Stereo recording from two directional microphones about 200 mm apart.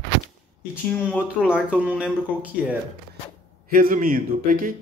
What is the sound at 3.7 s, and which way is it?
A man's voice, 45° right (ahead or behind).